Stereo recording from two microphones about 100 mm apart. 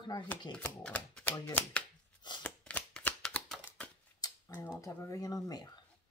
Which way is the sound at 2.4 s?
15° left (ahead or behind).